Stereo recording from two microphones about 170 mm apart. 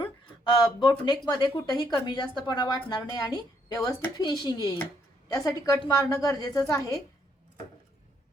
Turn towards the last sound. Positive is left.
turn(degrees=20)  # may be behind; listen again after turning